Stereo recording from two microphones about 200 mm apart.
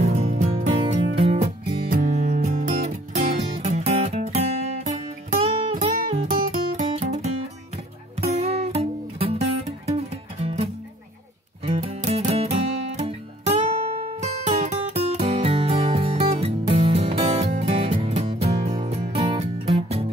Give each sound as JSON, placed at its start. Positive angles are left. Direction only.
{"t": 0.0, "sound": "music", "side_deg": -35}
{"t": 14.2, "sound": "music", "side_deg": -35}